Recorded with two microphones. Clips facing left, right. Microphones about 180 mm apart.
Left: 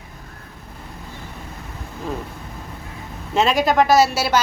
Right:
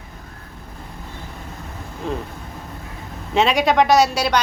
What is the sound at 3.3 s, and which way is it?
Speech, centre (ahead or behind).